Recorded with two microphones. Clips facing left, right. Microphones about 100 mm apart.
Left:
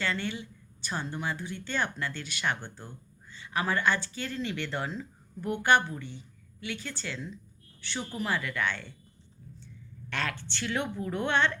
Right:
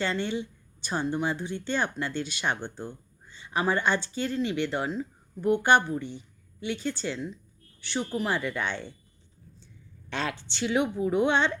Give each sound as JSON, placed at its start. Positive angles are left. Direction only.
{"t": 0.0, "sound": "speech", "side_deg": -25}
{"t": 10.1, "sound": "speech", "side_deg": -20}